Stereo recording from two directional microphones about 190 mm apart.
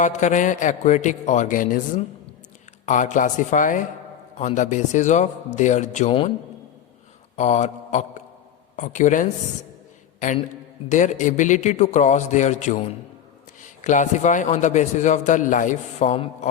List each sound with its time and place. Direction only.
0.0 s a man's voice: 40° left (ahead or behind)
6.1 s a man's voice: 25° left (ahead or behind)
7.3 s speech: 35° left (ahead or behind)
10.8 s a man's voice: 40° left (ahead or behind)